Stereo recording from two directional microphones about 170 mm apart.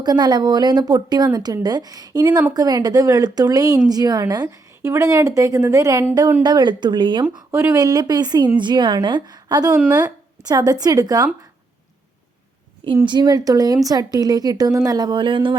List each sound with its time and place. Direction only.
0.0 s a woman's voice: 25° right (ahead or behind)
13.1 s a woman's voice: 25° right (ahead or behind)